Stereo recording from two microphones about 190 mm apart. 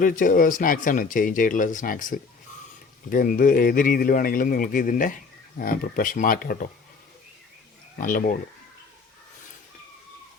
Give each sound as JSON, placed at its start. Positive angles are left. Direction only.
{"t": 0.0, "sound": "speech", "side_deg": 45}
{"t": 7.9, "sound": "speech", "side_deg": 45}